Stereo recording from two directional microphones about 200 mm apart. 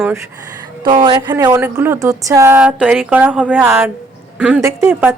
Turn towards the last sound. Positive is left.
turn(degrees=-10)  # may be behind; listen again after turning